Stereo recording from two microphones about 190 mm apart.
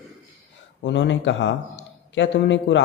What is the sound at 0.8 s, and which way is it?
A man's voice, 70° left (ahead or behind).